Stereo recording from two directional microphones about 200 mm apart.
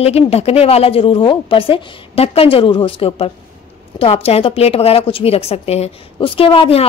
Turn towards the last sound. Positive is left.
turn(degrees=25)  # may be behind; listen again after turning